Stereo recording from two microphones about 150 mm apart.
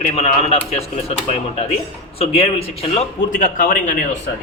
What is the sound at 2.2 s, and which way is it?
Speech, 40° left (ahead or behind).